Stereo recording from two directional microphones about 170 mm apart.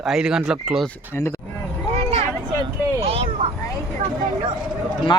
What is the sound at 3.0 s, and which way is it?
Vehicle, 35° right (ahead or behind).